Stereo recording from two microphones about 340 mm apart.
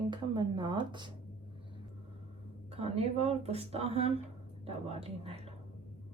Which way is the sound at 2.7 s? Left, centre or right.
Centre.